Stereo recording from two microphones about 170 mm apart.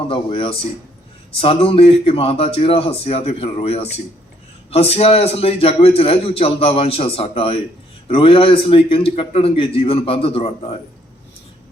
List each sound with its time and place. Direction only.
0.1 s a man's voice: 30° left (ahead or behind)